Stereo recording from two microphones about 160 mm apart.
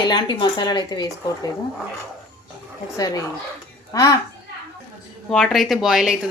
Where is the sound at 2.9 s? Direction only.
20° left (ahead or behind).